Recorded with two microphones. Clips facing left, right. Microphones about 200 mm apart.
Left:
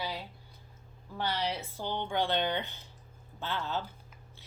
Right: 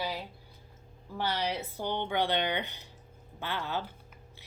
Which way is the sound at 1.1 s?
15° right (ahead or behind).